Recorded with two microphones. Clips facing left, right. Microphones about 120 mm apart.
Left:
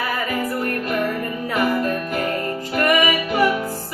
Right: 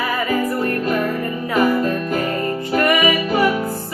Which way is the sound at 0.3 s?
30° right (ahead or behind).